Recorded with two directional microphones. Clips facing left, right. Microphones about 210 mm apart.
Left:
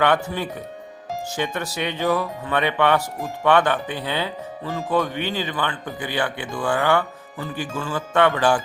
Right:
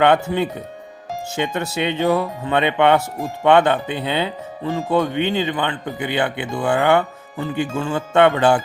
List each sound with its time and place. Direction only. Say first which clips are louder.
0.0 s speech: right 5 dB; 20° right (ahead or behind)